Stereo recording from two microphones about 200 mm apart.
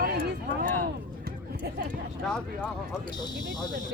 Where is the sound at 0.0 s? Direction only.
50° right (ahead or behind).